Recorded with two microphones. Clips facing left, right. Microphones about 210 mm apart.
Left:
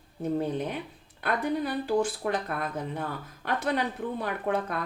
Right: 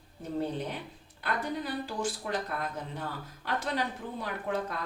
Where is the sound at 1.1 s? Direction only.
60° left (ahead or behind).